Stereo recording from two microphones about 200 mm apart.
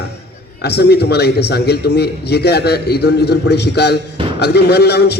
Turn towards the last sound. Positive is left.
turn(degrees=55)  # may be behind; listen again after turning